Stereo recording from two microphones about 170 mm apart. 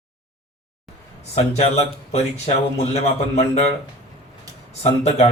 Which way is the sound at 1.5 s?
40° left (ahead or behind).